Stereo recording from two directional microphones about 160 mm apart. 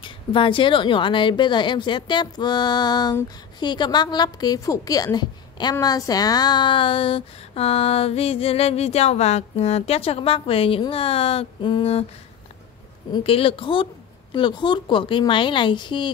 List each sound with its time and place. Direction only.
0.0 s a woman's voice: 30° left (ahead or behind)
13.1 s a woman's voice: 35° left (ahead or behind)